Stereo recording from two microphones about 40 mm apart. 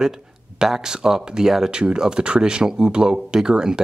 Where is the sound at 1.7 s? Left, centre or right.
Right.